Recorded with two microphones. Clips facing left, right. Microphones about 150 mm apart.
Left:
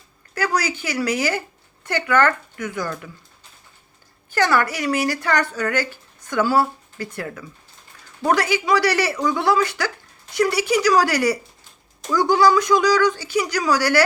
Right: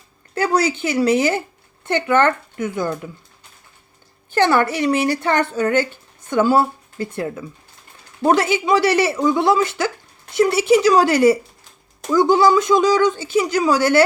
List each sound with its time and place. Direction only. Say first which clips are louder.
0.3 s speech: right 5 dB; 25° right (ahead or behind)
4.3 s speech: right 3 dB; 25° right (ahead or behind)